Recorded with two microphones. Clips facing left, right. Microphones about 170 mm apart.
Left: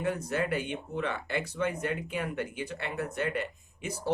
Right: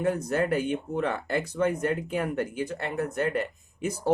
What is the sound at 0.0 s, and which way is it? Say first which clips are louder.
Speech: right 5 dB; 45° right (ahead or behind).